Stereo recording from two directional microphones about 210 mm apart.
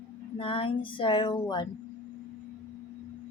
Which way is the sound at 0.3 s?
25° left (ahead or behind).